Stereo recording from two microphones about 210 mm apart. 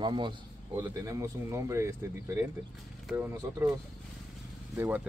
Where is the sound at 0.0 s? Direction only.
20° right (ahead or behind).